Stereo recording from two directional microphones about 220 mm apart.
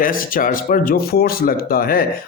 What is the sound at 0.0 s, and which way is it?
A man's voice, 40° left (ahead or behind).